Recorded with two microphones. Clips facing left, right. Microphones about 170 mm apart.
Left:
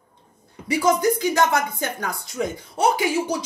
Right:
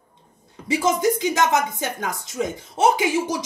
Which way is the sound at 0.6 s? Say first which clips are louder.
Left 1 dB; 20° right (ahead or behind).